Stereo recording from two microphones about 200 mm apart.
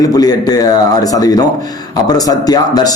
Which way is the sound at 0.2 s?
20° left (ahead or behind).